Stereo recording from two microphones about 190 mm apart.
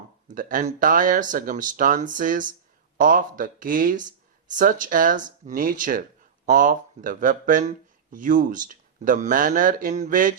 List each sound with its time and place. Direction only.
0.3 s speech: 45° right (ahead or behind)